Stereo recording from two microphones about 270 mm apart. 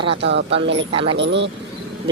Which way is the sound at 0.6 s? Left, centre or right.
Right.